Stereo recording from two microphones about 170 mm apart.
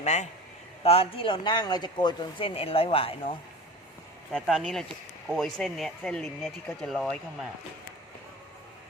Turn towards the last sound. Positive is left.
turn(degrees=0)  # may be behind; listen again after turning